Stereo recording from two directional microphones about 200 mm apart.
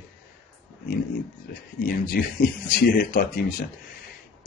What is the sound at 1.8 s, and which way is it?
Speech, 45° left (ahead or behind).